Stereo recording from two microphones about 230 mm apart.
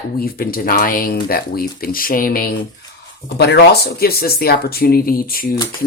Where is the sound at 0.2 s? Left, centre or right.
Left.